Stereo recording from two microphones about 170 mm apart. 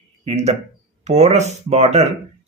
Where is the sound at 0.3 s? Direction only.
40° right (ahead or behind).